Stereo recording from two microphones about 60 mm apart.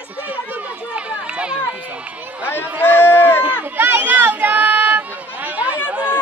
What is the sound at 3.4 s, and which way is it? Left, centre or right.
Run, right.